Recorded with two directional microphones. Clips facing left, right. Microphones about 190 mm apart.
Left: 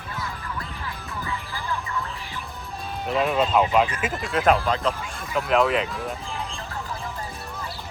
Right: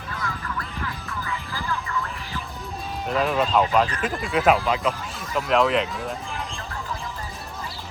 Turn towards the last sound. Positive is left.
turn(degrees=0)  # may be behind; listen again after turning